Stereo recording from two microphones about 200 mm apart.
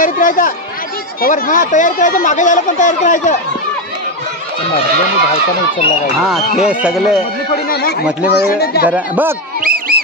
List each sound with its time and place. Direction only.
0.0 s speech: 45° left (ahead or behind)
6.6 s speech: 5° right (ahead or behind)
7.5 s speech: 50° left (ahead or behind)
8.8 s speech: 10° right (ahead or behind)
9.6 s a sound: 45° right (ahead or behind)